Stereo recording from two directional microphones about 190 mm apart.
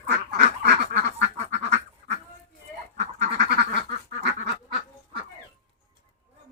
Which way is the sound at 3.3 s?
65° right (ahead or behind).